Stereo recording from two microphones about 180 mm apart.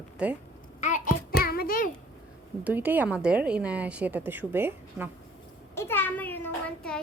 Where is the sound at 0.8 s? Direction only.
45° left (ahead or behind).